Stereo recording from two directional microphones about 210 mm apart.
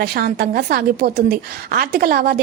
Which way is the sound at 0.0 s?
45° right (ahead or behind).